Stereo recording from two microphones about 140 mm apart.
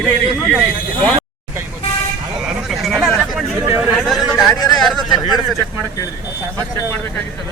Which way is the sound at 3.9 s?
Centre (ahead or behind).